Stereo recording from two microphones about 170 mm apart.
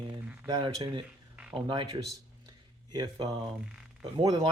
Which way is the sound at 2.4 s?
25° right (ahead or behind).